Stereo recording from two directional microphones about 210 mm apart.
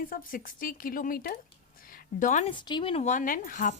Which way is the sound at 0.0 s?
40° left (ahead or behind).